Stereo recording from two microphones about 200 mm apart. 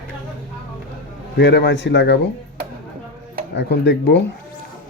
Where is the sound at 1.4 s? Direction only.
60° left (ahead or behind).